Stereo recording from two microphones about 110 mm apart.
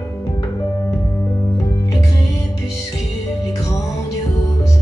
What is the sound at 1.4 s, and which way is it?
Music, 30° left (ahead or behind).